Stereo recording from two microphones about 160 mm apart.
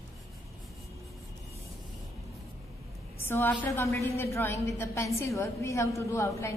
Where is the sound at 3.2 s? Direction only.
15° left (ahead or behind).